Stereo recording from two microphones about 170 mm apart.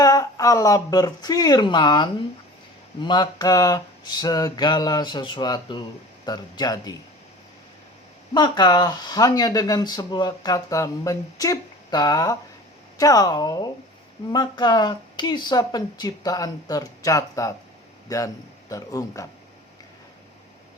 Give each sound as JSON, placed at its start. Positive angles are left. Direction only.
{"t": 0.0, "sound": "speech", "side_deg": 20}
{"t": 8.3, "sound": "speech", "side_deg": 25}